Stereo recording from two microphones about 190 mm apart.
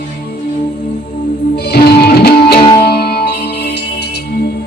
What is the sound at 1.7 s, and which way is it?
Music, 55° left (ahead or behind).